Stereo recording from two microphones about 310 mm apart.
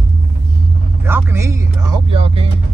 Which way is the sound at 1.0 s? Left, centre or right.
Centre.